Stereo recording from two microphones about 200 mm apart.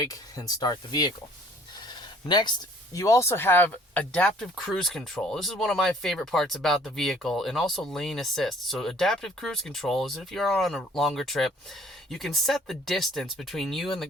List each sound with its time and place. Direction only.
0.0 s speech: 20° left (ahead or behind)
1.9 s a sound: 20° left (ahead or behind)
2.9 s speech: 15° left (ahead or behind)